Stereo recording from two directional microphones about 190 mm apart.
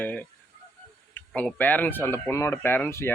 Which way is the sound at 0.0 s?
10° left (ahead or behind).